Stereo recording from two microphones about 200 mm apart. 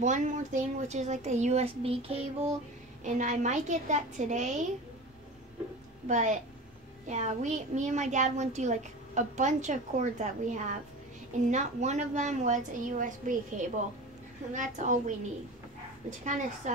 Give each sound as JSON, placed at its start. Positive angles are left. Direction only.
{"t": 0.0, "sound": "a child's voice", "side_deg": -40}
{"t": 6.0, "sound": "a child's voice", "side_deg": -40}